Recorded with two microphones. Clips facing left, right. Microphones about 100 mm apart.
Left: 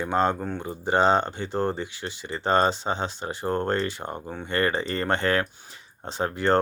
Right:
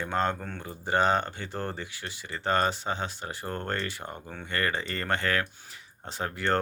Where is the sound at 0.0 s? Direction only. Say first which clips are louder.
Left 5 dB; 20° left (ahead or behind).